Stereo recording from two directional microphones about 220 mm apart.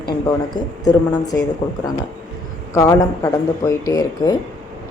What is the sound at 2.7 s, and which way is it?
A woman's voice, 15° left (ahead or behind).